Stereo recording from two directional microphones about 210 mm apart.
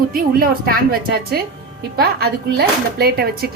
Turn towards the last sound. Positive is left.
turn(degrees=-50)  # may be behind; listen again after turning